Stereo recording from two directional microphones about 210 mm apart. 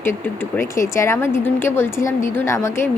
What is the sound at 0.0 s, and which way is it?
A woman's voice, 10° left (ahead or behind).